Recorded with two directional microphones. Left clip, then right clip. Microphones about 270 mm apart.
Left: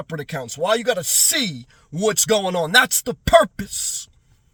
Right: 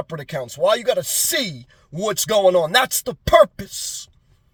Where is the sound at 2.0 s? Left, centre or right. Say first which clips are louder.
Right 2 dB; centre.